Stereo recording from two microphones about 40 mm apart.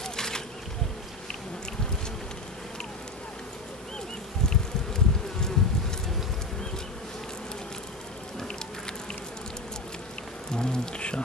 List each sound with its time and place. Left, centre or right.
0.0 s a sound: centre
4.5 s bee: centre
10.5 s rain: centre